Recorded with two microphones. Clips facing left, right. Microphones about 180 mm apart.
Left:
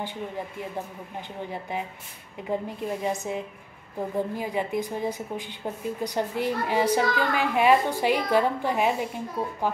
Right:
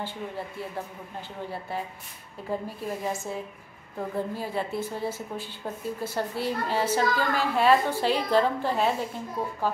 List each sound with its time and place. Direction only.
1.5 s a woman's voice: 15° left (ahead or behind)